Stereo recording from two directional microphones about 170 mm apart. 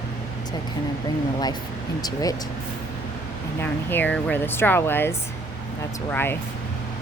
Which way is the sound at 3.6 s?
10° left (ahead or behind).